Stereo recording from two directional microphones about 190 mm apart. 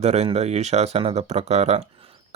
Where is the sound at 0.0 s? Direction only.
35° right (ahead or behind).